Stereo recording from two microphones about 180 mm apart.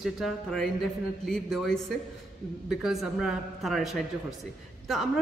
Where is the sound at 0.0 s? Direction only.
Centre (ahead or behind).